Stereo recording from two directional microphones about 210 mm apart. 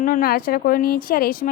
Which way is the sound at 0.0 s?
40° left (ahead or behind).